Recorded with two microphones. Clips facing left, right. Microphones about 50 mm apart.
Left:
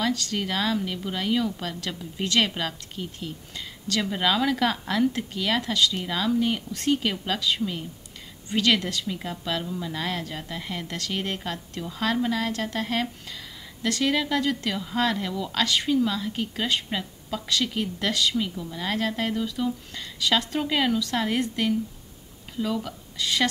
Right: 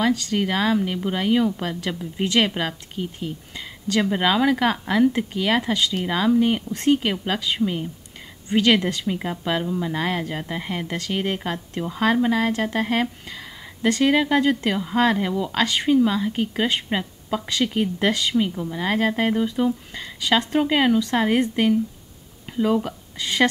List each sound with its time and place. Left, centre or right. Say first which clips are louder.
0.0 s speech: right 5 dB; centre